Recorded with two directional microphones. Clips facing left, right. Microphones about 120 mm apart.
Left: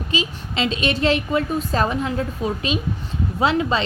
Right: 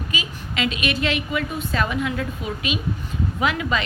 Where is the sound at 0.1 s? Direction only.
30° left (ahead or behind).